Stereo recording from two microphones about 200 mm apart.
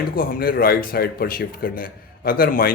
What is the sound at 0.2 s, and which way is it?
A man's voice, 50° left (ahead or behind).